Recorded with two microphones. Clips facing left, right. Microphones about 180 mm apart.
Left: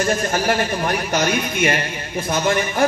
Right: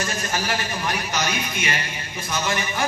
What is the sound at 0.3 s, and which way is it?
Speech, 55° left (ahead or behind).